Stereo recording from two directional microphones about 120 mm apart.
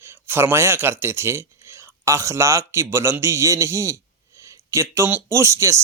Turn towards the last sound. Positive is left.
turn(degrees=-25)  # may be behind; listen again after turning